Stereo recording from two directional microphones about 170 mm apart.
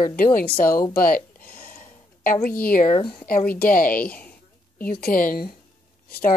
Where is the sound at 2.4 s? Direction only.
55° left (ahead or behind).